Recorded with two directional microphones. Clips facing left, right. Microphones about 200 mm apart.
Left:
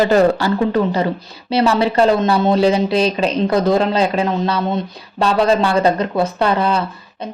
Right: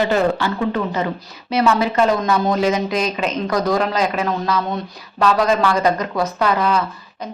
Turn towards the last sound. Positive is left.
turn(degrees=30)  # may be behind; listen again after turning